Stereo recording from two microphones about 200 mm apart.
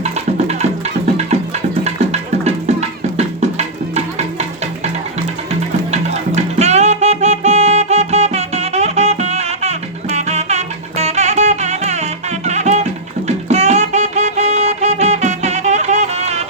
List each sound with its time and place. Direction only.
0.0 s music: 30° right (ahead or behind)
1.8 s music: 35° right (ahead or behind)
5.5 s music: 35° right (ahead or behind)